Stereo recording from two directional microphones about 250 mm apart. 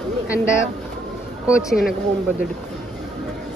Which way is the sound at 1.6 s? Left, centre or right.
Centre.